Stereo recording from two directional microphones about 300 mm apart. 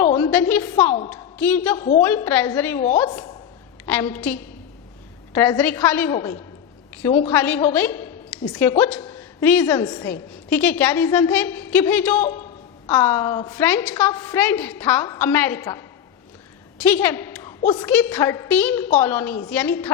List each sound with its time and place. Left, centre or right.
0.0 s a sound: centre
0.8 s a woman's voice: centre
1.1 s a woman's voice: centre
1.7 s a woman's voice: centre
2.0 s a woman's voice: centre
2.8 s a woman's voice: centre
7.3 s a woman's voice: centre
7.6 s a sound: centre
8.5 s a woman's voice: centre
16.7 s a sound: centre
17.6 s a woman's voice: centre
18.9 s a woman's voice: left
19.1 s a woman's voice: centre